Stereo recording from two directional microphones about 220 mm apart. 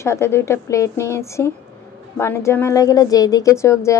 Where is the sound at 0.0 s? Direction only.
10° left (ahead or behind).